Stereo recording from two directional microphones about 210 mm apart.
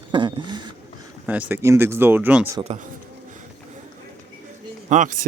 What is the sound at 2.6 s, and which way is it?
Speech, 30° right (ahead or behind).